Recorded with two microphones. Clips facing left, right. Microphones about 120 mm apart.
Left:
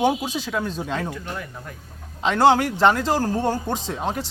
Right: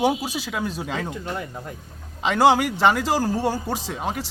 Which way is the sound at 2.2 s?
10° right (ahead or behind).